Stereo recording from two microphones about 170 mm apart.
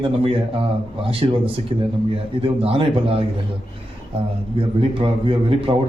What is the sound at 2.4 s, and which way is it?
Speech, 35° right (ahead or behind).